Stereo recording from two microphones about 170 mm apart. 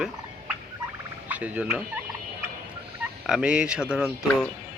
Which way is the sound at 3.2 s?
5° right (ahead or behind).